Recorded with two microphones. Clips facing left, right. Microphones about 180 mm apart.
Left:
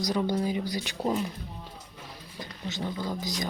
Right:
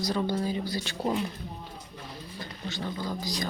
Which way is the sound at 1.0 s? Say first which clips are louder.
Left 1 dB; centre (ahead or behind).